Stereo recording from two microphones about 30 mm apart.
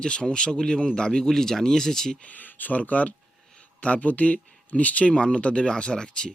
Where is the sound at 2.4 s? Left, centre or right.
Left.